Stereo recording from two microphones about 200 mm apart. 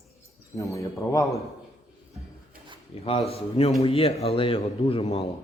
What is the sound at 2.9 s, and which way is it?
A man's voice, 30° left (ahead or behind).